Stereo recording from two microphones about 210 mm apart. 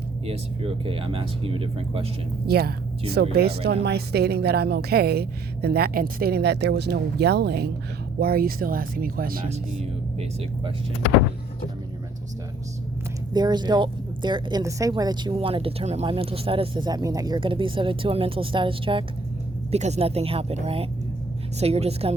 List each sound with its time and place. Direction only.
0.3 s a woman's voice: 25° right (ahead or behind)
2.5 s a woman's voice: 45° right (ahead or behind)
9.8 s speech: 30° right (ahead or behind)
13.3 s a woman's voice: 20° right (ahead or behind)